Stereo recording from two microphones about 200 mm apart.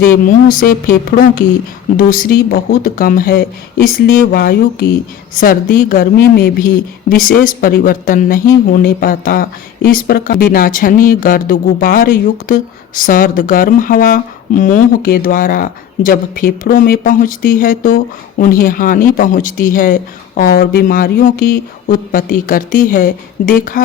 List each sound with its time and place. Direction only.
0.0 s speech: 45° left (ahead or behind)